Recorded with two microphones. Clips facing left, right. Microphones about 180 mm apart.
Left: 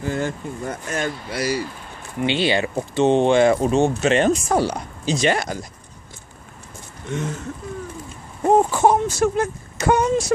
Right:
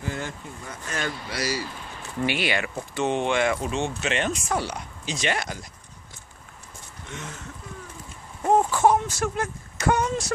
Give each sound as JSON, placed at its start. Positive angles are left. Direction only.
{"t": 0.0, "sound": "speech", "side_deg": 45}
{"t": 2.1, "sound": "speech", "side_deg": 25}
{"t": 7.1, "sound": "speech", "side_deg": 45}
{"t": 8.5, "sound": "a sound", "side_deg": 20}
{"t": 8.9, "sound": "speech", "side_deg": 30}